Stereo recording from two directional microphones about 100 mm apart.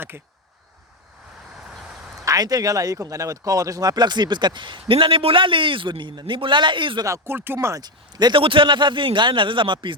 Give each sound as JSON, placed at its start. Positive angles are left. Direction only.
{"t": 0.1, "sound": "speech", "side_deg": -25}
{"t": 2.2, "sound": "speech", "side_deg": -40}
{"t": 7.0, "sound": "speech", "side_deg": -25}
{"t": 7.8, "sound": "speech", "side_deg": -45}
{"t": 8.4, "sound": "speech", "side_deg": -60}